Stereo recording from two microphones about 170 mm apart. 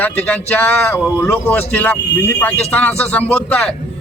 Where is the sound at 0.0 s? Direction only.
10° left (ahead or behind).